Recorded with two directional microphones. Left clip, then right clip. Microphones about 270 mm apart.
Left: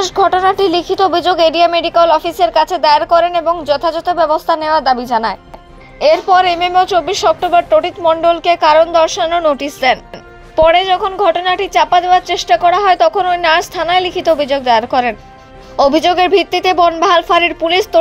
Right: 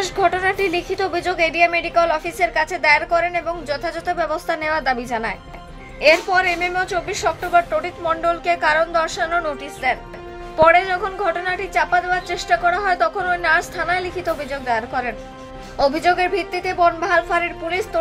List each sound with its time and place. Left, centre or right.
0.0 s speech: centre
1.4 s a woman's voice: centre
2.0 s a woman's voice: centre